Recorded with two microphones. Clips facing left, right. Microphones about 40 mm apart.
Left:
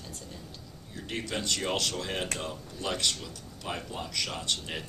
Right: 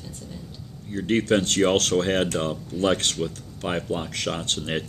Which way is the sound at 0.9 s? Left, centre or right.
Right.